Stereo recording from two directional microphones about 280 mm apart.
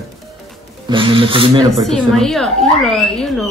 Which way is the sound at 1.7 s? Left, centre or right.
Centre.